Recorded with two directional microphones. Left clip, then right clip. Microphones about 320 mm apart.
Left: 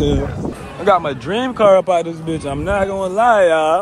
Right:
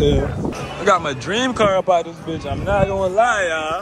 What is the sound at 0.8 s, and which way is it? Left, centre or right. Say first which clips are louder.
Speech: left 2 dB; centre.